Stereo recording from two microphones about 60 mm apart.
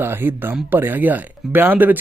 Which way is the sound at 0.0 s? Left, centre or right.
Right.